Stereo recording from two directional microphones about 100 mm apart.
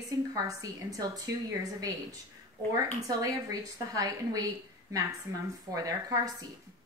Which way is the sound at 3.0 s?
35° right (ahead or behind).